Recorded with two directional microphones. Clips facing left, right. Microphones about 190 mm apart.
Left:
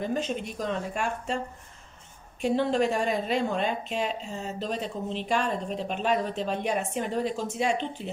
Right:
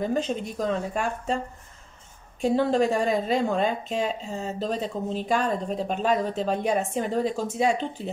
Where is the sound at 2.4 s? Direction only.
35° right (ahead or behind).